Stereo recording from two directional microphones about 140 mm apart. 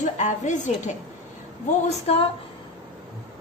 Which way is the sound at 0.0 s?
60° left (ahead or behind).